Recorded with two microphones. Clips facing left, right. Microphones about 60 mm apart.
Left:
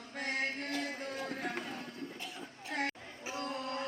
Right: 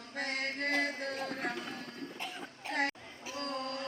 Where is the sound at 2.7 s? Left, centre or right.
Right.